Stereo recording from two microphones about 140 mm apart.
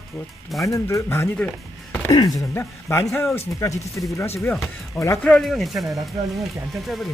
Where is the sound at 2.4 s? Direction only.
20° left (ahead or behind).